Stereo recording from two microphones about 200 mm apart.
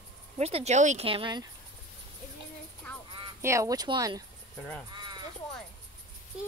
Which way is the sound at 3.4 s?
15° right (ahead or behind).